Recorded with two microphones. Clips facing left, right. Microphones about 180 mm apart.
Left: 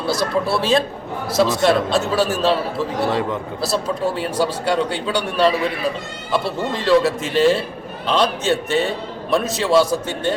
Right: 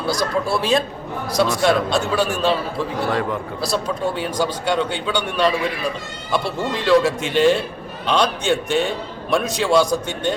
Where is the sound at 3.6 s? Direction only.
5° left (ahead or behind).